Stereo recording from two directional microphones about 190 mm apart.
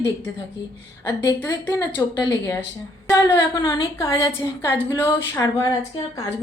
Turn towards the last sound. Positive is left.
turn(degrees=15)  # may be behind; listen again after turning